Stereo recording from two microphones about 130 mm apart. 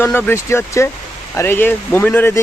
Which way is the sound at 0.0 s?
15° left (ahead or behind).